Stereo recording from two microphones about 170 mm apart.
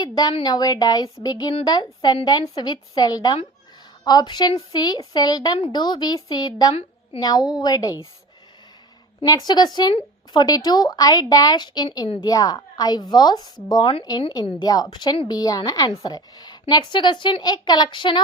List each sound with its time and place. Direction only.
0.0 s speech: 25° left (ahead or behind)
9.2 s speech: 25° left (ahead or behind)